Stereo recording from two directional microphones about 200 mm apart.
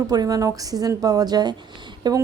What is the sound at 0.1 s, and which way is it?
Speech, 20° right (ahead or behind).